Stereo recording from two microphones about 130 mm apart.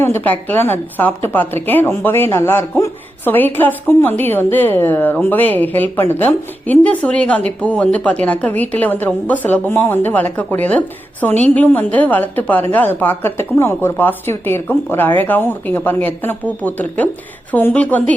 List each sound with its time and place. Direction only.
0.0 s speech: 15° left (ahead or behind)